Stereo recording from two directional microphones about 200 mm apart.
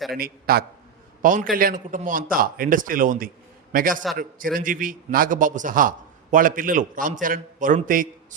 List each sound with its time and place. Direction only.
0.2 s a man's voice: 50° right (ahead or behind)